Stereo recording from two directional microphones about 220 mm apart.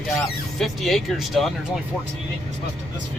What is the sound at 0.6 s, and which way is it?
Speech, centre (ahead or behind).